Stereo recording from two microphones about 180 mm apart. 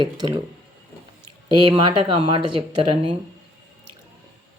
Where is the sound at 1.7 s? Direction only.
30° right (ahead or behind).